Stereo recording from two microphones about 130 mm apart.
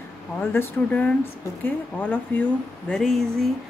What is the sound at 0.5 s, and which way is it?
Speech, 15° left (ahead or behind).